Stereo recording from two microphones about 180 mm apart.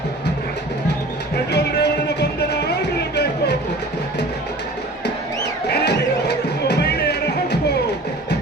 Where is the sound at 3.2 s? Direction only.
70° left (ahead or behind).